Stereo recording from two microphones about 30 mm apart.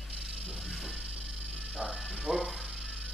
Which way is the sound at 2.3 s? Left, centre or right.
Centre.